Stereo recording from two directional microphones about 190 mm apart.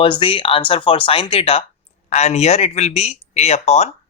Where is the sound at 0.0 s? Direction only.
25° left (ahead or behind).